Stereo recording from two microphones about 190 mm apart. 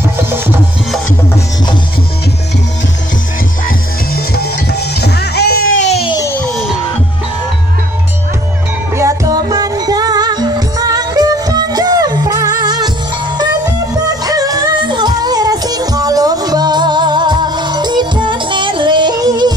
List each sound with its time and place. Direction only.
3.6 s music: 55° left (ahead or behind)
5.8 s baby cry: 35° left (ahead or behind)
6.1 s a sound: 15° left (ahead or behind)
8.9 s music: 15° right (ahead or behind)
14.0 s music: 20° right (ahead or behind)